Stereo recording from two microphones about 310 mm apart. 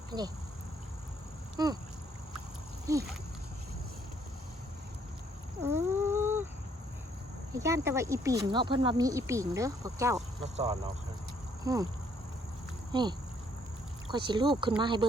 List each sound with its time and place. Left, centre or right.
0.1 s speech: centre
1.5 s speech: centre
2.8 s speech: centre
5.6 s dog: centre
7.6 s speech: centre
10.4 s speech: centre
12.9 s speech: centre